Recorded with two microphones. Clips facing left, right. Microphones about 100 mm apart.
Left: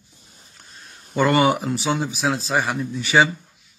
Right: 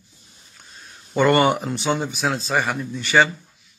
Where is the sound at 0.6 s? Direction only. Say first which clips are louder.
Right 1 dB; centre (ahead or behind).